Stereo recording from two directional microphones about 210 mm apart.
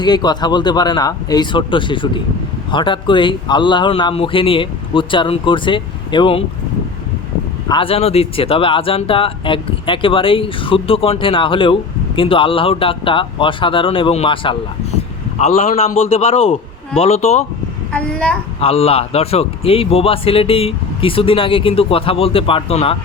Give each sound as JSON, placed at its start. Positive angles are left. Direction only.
{"t": 0.0, "sound": "speech", "side_deg": 20}
{"t": 7.7, "sound": "a man's voice", "side_deg": 25}
{"t": 17.9, "sound": "a child's voice", "side_deg": 5}
{"t": 18.6, "sound": "speech", "side_deg": 30}